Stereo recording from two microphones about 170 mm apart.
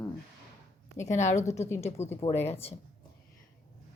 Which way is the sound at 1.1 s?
45° left (ahead or behind).